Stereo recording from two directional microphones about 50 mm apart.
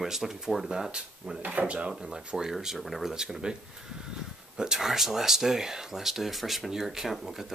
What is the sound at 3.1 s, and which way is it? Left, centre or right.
Speech, centre.